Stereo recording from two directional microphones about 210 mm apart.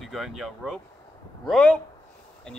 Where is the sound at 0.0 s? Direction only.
Centre (ahead or behind).